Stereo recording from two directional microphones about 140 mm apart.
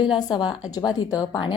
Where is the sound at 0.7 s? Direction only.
30° left (ahead or behind).